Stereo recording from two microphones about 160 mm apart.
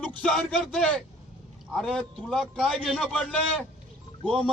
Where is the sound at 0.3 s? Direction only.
Centre (ahead or behind).